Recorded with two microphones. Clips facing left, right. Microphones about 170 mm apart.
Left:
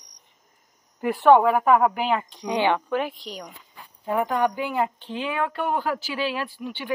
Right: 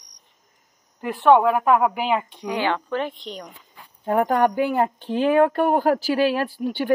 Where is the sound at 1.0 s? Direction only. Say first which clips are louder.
Even; 5° left (ahead or behind).